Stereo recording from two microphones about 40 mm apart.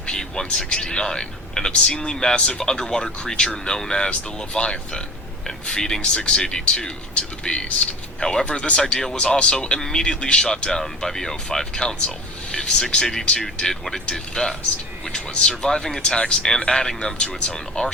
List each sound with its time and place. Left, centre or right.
0.0 s a sound: centre
0.6 s a man's voice: centre
6.0 s a man's voice: left
8.2 s speech: centre
8.4 s a man's voice: left
10.7 s a man's voice: centre
15.7 s a man's voice: centre